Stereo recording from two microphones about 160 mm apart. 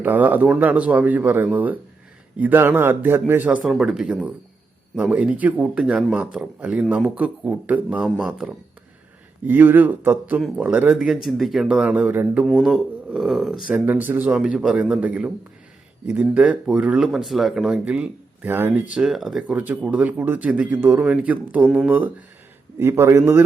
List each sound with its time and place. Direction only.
0.0 s speech: 10° right (ahead or behind)